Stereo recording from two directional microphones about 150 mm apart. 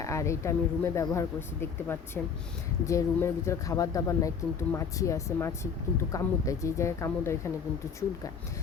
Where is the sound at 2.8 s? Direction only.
20° left (ahead or behind).